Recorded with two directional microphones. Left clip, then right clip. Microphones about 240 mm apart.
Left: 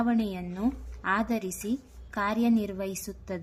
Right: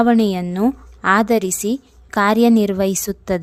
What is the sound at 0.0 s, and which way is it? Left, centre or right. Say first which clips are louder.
A woman's voice: right 14 dB; right.